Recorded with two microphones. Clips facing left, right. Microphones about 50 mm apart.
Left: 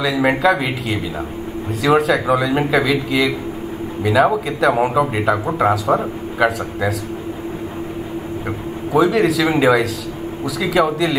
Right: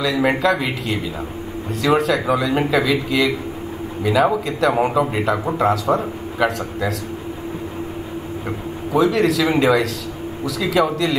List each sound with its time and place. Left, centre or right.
0.0 s a man's voice: centre
8.9 s speech: centre